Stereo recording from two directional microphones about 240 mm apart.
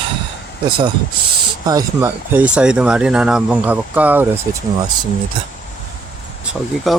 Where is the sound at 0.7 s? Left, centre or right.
Centre.